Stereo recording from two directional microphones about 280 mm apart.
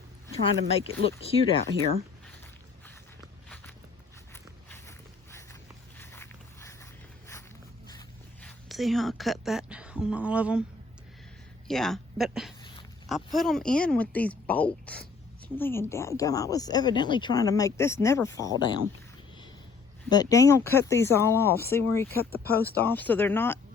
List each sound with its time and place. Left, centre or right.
1.0 s speech: left
4.7 s mechanisms: centre
6.0 s a sound: centre
7.9 s dog: centre
8.4 s speech: centre
11.7 s speech: centre
20.1 s speech: centre
22.1 s speech: left
22.8 s speech: centre